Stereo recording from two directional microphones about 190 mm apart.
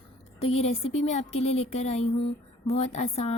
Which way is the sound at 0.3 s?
35° left (ahead or behind).